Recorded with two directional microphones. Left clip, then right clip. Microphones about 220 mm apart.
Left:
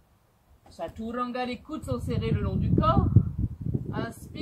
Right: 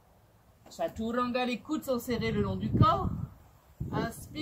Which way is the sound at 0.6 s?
15° right (ahead or behind).